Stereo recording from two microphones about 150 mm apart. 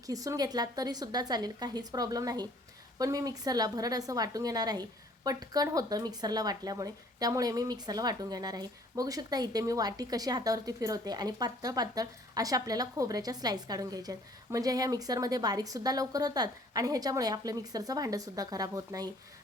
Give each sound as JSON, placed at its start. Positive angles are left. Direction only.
{"t": 0.1, "sound": "a woman's voice", "side_deg": -25}